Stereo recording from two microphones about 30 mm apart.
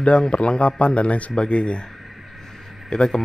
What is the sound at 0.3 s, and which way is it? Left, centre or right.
A man's voice, left.